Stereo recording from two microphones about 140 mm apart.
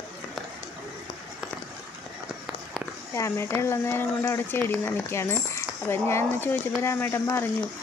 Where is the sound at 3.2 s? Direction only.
20° left (ahead or behind).